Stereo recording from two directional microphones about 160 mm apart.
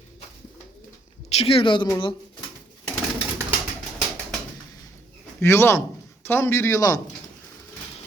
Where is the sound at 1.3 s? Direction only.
35° left (ahead or behind).